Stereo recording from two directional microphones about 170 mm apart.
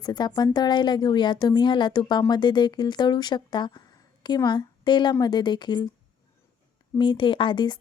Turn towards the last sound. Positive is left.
turn(degrees=25)  # may be behind; listen again after turning